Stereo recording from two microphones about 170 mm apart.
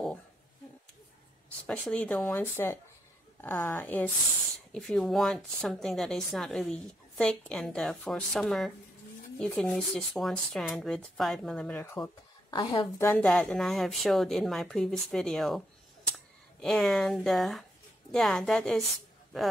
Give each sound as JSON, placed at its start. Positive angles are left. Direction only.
{"t": 1.7, "sound": "a woman's voice", "side_deg": 5}
{"t": 12.4, "sound": "a woman's voice", "side_deg": 25}
{"t": 13.3, "sound": "a woman's voice", "side_deg": 5}